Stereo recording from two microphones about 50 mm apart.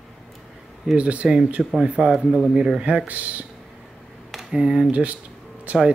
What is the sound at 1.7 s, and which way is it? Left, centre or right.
Speech, centre.